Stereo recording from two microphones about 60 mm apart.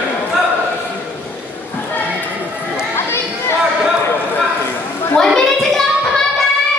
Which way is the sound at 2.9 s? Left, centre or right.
Left.